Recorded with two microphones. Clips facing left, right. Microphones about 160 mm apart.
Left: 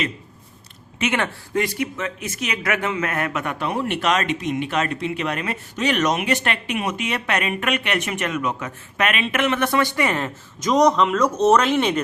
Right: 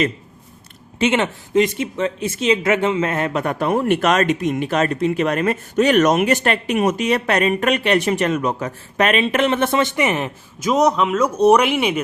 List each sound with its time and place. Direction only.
0.9 s speech: 25° right (ahead or behind)
10.6 s speech: 5° right (ahead or behind)